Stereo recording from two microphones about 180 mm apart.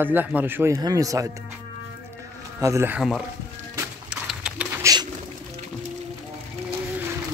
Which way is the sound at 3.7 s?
5° right (ahead or behind).